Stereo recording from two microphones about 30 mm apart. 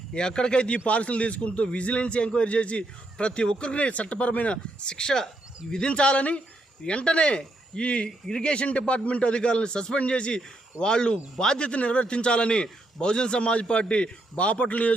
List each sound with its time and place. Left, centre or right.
0.1 s speech: left
0.9 s a man's voice: left
3.8 s speech: left
4.5 s speech: left
5.9 s a man's voice: left
11.7 s a man's voice: left